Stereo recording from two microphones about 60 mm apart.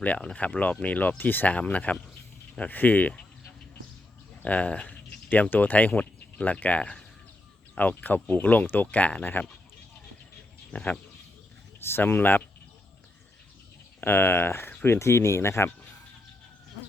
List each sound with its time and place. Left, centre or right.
0.2 s speech: centre
0.4 s speech: left
4.4 s speech: left
10.7 s speech: left
11.8 s speech: left
14.0 s speech: left